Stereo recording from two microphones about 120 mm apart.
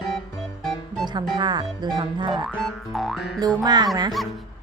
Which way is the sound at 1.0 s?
40° right (ahead or behind).